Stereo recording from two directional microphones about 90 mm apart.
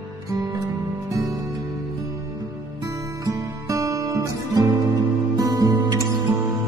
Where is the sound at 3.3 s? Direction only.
40° right (ahead or behind).